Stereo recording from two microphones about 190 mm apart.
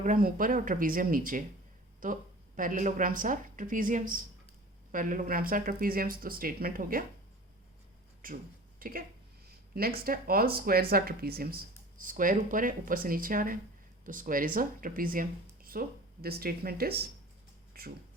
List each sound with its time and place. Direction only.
0.0 s speech: 45° right (ahead or behind)
8.2 s speech: 45° right (ahead or behind)